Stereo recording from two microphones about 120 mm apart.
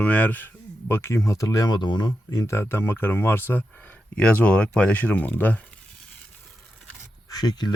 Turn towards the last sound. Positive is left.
turn(degrees=35)  # may be behind; listen again after turning